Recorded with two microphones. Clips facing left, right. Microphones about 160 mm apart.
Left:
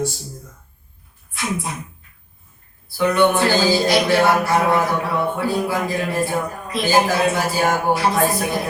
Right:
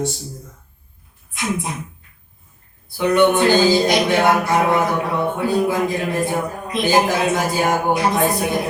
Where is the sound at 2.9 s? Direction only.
20° right (ahead or behind).